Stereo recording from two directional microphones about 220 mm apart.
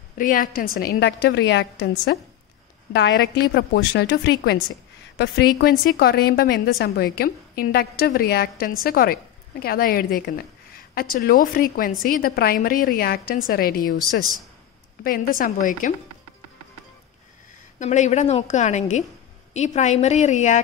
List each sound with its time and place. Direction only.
0.2 s a woman's voice: 40° left (ahead or behind)
15.0 s a woman's voice: 40° left (ahead or behind)
17.7 s a woman's voice: 35° left (ahead or behind)